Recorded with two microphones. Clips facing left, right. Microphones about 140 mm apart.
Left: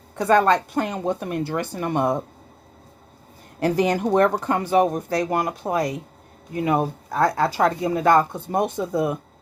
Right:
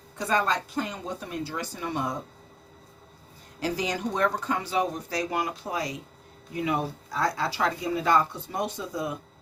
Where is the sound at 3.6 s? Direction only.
55° left (ahead or behind).